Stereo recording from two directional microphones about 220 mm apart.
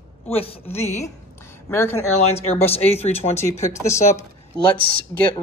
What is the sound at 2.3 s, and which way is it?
Speech, 30° left (ahead or behind).